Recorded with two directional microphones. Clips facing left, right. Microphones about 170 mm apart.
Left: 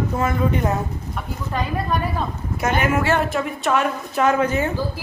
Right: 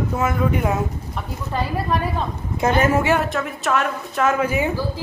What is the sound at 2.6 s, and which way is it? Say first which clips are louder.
Speech: right 3 dB; 30° right (ahead or behind).